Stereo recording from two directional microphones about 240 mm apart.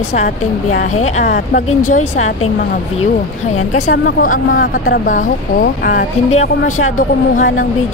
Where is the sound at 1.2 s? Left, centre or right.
Left.